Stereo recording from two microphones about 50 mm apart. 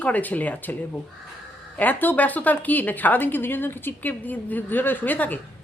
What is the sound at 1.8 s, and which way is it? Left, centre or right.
A woman's voice, left.